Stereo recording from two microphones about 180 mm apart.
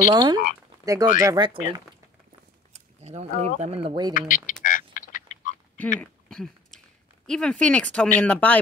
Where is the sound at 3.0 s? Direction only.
35° right (ahead or behind).